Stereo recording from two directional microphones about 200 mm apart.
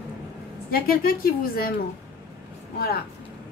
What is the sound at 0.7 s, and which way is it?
Speech, 45° left (ahead or behind).